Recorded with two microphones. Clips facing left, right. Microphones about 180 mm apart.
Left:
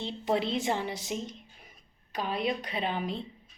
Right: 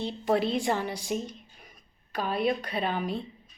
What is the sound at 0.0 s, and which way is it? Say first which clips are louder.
Speech: right 3 dB; 20° left (ahead or behind).